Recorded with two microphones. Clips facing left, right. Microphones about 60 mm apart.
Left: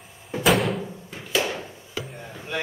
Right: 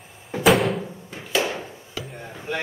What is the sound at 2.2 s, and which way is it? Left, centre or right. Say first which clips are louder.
Chop: right 3 dB; centre.